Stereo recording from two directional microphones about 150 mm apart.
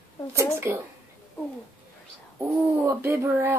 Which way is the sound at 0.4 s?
15° right (ahead or behind).